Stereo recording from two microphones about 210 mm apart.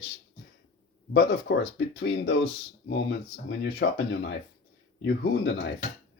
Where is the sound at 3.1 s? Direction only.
50° left (ahead or behind).